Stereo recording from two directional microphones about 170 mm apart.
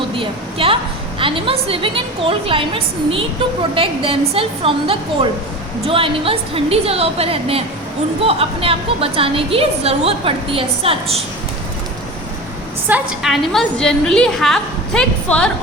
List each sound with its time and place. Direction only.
0.2 s a woman's voice: 30° right (ahead or behind)
12.9 s a woman's voice: centre (ahead or behind)